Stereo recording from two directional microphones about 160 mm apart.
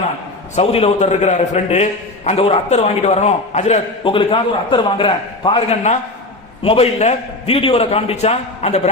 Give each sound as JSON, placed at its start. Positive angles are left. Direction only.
{"t": 0.5, "sound": "a man's voice", "side_deg": 40}